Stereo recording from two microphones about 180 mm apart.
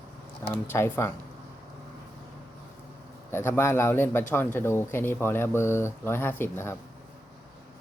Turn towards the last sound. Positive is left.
turn(degrees=10)  # may be behind; listen again after turning